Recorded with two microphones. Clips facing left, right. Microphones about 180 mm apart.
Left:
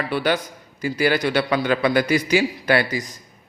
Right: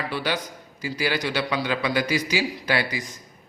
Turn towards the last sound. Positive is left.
turn(degrees=50)  # may be behind; listen again after turning